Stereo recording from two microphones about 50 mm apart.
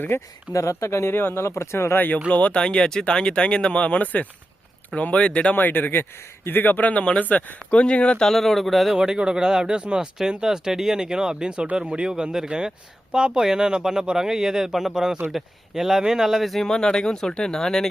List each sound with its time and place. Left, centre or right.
0.1 s speech: left
0.5 s speech: left
2.0 s a man's voice: left
2.6 s speech: centre
5.5 s a man's voice: left
8.3 s speech: centre
8.9 s speech: centre
16.6 s speech: centre